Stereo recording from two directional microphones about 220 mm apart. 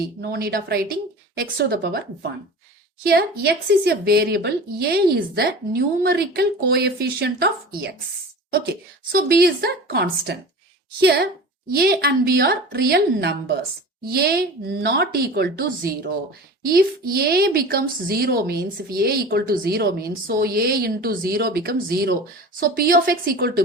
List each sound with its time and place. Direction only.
0.2 s a woman's voice: 45° right (ahead or behind)
3.0 s a woman's voice: 45° right (ahead or behind)